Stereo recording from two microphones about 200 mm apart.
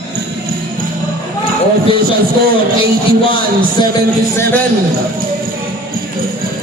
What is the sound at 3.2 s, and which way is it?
Speech, 25° left (ahead or behind).